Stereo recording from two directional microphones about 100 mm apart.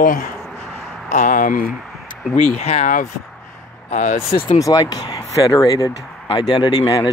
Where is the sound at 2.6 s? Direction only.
90° left.